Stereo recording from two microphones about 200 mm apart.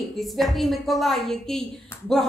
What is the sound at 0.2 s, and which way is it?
A woman's voice, centre (ahead or behind).